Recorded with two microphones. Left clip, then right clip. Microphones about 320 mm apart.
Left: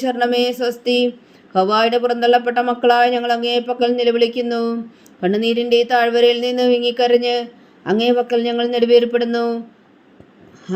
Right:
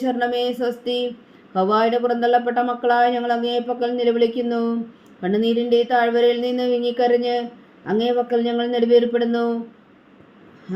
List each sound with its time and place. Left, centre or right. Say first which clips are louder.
0.0 s speech: left 4 dB; left